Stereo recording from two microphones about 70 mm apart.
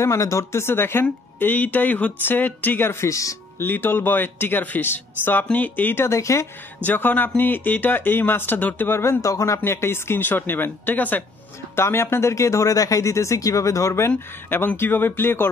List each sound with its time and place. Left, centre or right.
0.0 s speech: left
3.1 s speech: left
3.5 s speech: left
6.0 s speech: left
6.8 s speech: left
9.7 s speech: left
11.7 s speech: left
14.6 s speech: left